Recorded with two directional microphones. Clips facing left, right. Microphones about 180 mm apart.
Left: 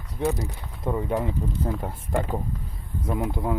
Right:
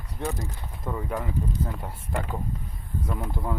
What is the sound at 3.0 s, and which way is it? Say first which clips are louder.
Speech: left 6 dB; 15° left (ahead or behind).